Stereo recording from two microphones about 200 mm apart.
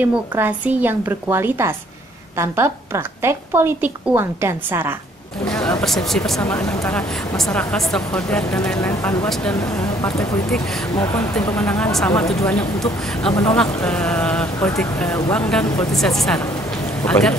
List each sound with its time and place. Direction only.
0.0 s a woman's voice: 10° right (ahead or behind)
5.8 s speech: centre (ahead or behind)
13.6 s speech: 5° left (ahead or behind)